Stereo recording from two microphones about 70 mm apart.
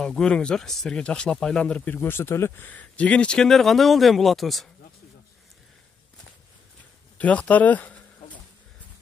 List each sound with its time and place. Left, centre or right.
0.0 s speech: centre
1.9 s speech: left; by 4.6 s centre
7.2 s speech: left